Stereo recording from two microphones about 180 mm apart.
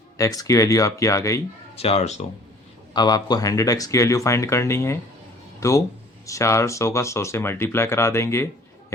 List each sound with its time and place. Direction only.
0.2 s speech: 20° left (ahead or behind)
1.7 s speech: 35° left (ahead or behind)
2.9 s speech: 20° left (ahead or behind)